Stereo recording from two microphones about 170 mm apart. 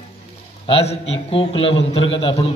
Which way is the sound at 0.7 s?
35° left (ahead or behind).